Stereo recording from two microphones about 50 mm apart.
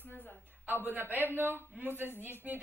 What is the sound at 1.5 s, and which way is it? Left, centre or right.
Speech, left.